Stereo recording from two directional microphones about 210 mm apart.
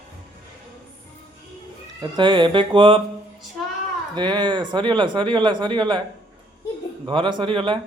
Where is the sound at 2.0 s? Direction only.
20° right (ahead or behind).